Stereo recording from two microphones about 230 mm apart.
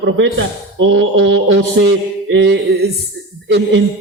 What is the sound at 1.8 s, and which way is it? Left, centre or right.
A man's voice, right.